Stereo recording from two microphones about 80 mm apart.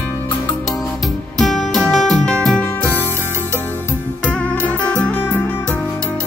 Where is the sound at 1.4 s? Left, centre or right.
Centre.